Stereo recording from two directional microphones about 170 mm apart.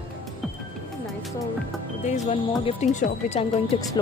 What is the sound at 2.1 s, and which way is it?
Speech, 40° left (ahead or behind).